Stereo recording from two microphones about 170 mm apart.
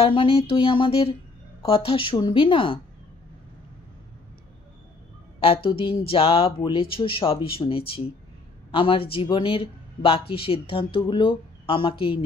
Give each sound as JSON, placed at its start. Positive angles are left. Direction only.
{"t": 0.0, "sound": "speech", "side_deg": 30}
{"t": 5.4, "sound": "speech", "side_deg": 35}